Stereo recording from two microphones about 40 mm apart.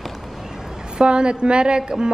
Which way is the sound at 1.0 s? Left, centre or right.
Right.